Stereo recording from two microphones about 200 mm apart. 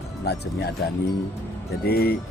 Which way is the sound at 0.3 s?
50° left (ahead or behind).